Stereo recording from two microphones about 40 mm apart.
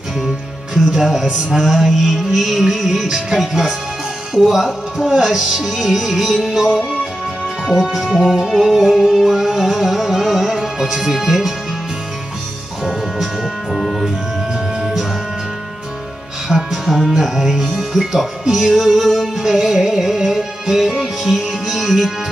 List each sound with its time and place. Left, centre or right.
1.2 s music: centre
12.8 s music: centre
16.4 s music: centre